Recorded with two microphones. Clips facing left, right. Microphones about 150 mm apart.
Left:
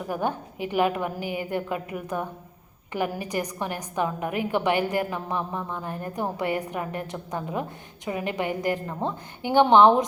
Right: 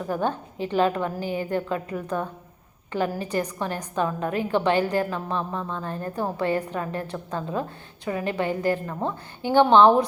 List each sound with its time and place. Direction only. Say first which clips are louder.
0.1 s a woman's voice: right 1 dB; 15° left (ahead or behind)